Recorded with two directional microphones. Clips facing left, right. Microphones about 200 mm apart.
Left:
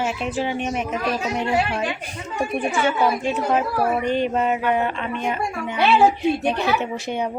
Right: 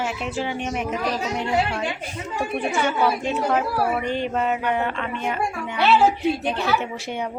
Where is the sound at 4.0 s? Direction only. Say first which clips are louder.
Left 3 dB; 15° left (ahead or behind).